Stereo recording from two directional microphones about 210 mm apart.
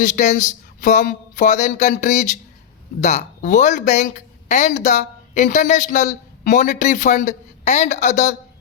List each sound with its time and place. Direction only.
0.0 s speech: 35° left (ahead or behind)